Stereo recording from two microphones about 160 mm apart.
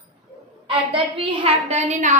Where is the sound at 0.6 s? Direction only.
35° right (ahead or behind).